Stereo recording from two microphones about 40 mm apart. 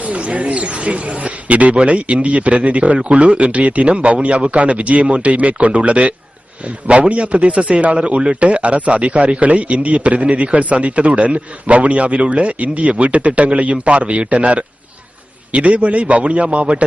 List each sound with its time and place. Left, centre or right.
0.0 s a man's voice: right